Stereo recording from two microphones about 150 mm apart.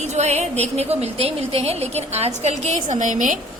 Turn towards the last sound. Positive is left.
turn(degrees=-60)  # may be behind; listen again after turning